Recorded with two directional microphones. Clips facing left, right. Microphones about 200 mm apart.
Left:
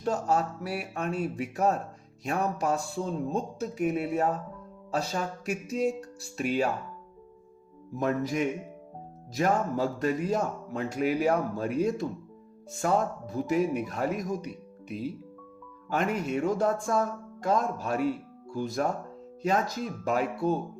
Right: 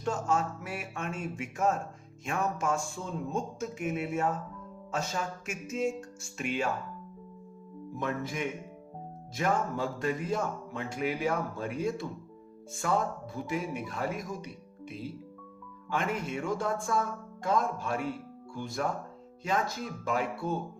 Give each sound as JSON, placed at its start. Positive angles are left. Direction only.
{"t": 0.0, "sound": "a man's voice", "side_deg": 35}
{"t": 7.9, "sound": "a man's voice", "side_deg": 40}